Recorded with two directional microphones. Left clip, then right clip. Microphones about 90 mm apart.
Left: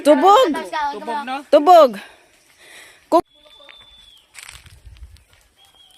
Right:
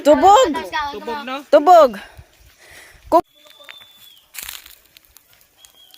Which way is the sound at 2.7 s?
25° left (ahead or behind).